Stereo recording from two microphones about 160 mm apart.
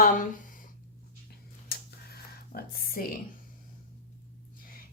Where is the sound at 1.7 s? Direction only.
70° left (ahead or behind).